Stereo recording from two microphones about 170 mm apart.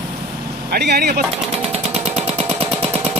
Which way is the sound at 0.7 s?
70° right (ahead or behind).